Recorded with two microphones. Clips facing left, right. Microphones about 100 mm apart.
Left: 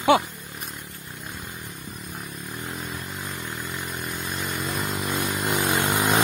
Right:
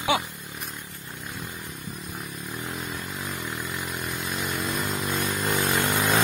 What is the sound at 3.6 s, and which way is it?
Vehicle, centre (ahead or behind).